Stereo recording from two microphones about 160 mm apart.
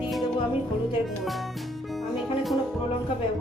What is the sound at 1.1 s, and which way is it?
Music, centre (ahead or behind).